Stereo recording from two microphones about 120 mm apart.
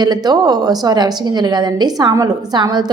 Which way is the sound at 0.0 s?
35° right (ahead or behind).